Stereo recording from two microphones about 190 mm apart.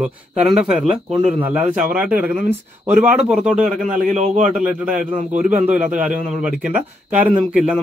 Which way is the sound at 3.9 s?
40° right (ahead or behind).